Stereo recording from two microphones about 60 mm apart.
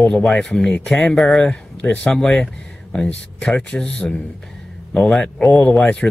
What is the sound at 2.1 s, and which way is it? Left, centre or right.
Speech, centre.